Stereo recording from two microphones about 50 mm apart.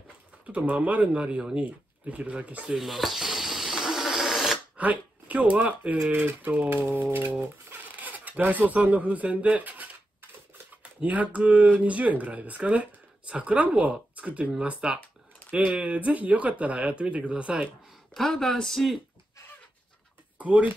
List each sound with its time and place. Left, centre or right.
0.5 s speech: right
2.8 s a sound: centre
4.7 s speech: right
6.8 s a sound: right
7.7 s speech: right
18.1 s speech: centre
20.3 s speech: right